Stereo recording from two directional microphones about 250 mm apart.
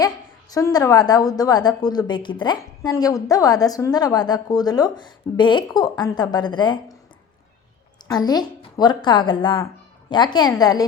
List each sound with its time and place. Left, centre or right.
0.5 s a woman's voice: centre
8.0 s a woman's voice: centre